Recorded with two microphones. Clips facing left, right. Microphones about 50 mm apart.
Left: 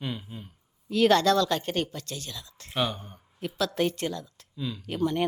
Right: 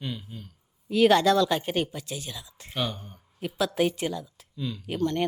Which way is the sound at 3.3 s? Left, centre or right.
Centre.